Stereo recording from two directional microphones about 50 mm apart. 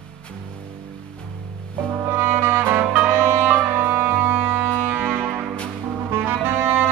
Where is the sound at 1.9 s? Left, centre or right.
Right.